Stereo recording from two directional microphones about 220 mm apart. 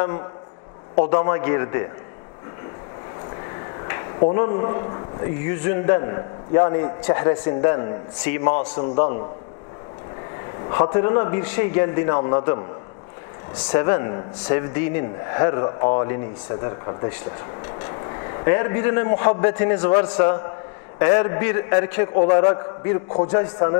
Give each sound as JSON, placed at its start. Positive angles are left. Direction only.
{"t": 0.9, "sound": "a man's voice", "side_deg": 30}
{"t": 4.2, "sound": "a man's voice", "side_deg": 30}
{"t": 10.7, "sound": "a man's voice", "side_deg": 25}
{"t": 13.7, "sound": "a man's voice", "side_deg": 25}